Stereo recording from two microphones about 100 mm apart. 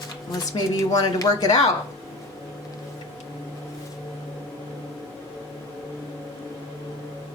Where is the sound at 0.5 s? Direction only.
40° left (ahead or behind).